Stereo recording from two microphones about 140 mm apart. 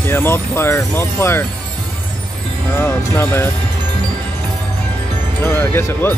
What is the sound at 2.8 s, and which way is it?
Speech, 15° left (ahead or behind).